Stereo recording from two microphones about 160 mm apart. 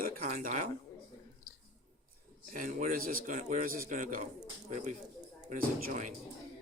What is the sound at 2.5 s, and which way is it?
A man's voice, 55° right (ahead or behind).